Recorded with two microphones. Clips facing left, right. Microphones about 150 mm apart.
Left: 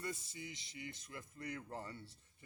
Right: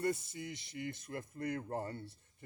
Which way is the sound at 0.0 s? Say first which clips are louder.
Right 9 dB; 60° right (ahead or behind).